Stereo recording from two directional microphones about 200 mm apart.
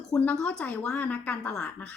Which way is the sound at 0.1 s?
5° left (ahead or behind).